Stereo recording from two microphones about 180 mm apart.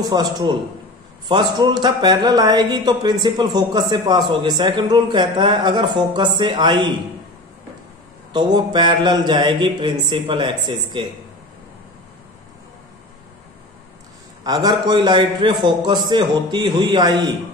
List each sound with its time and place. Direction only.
0.0 s speech: 20° right (ahead or behind)
8.3 s speech: 25° right (ahead or behind)
14.4 s speech: 20° right (ahead or behind)